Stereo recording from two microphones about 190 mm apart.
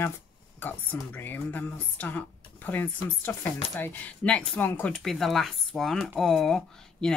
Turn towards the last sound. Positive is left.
turn(degrees=5)  # may be behind; listen again after turning